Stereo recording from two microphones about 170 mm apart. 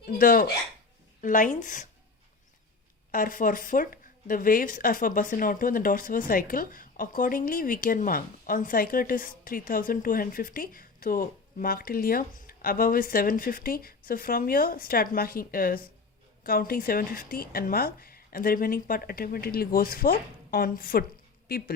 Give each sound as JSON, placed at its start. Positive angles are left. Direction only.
{"t": 0.1, "sound": "speech", "side_deg": 55}
{"t": 3.1, "sound": "speech", "side_deg": 55}